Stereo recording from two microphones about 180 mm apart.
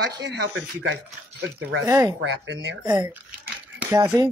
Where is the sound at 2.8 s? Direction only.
20° right (ahead or behind).